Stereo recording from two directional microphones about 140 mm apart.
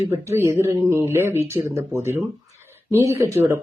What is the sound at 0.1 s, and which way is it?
Speech, 20° right (ahead or behind).